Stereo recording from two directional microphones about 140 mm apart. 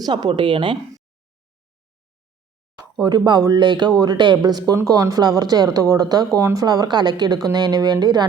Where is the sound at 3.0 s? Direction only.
30° right (ahead or behind).